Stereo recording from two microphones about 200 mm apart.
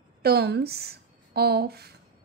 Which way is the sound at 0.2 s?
55° right (ahead or behind).